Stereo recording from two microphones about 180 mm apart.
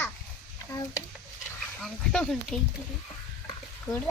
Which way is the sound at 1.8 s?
Centre (ahead or behind).